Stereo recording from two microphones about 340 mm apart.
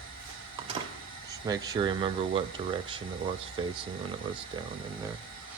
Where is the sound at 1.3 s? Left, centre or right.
Centre.